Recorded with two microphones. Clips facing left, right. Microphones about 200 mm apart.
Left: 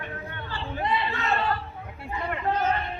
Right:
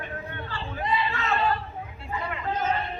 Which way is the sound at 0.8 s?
60° left (ahead or behind).